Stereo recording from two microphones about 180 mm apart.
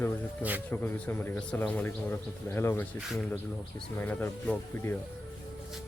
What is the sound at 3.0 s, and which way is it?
Speech, centre (ahead or behind).